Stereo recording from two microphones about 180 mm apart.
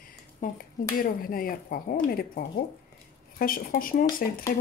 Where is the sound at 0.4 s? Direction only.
45° left (ahead or behind).